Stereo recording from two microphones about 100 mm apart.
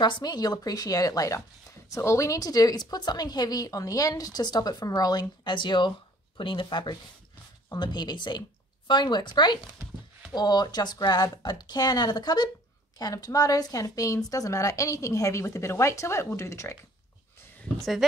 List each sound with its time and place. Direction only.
0.0 s a woman's voice: 45° left (ahead or behind); by 16.7 s 30° left (ahead or behind)